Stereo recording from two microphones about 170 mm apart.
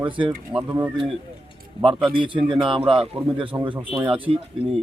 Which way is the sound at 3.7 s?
15° right (ahead or behind).